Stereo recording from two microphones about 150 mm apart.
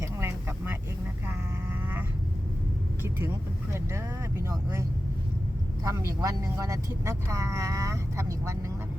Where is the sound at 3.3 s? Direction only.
20° right (ahead or behind).